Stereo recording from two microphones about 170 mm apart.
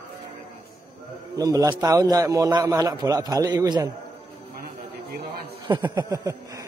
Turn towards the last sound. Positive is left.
turn(degrees=-20)  # may be behind; listen again after turning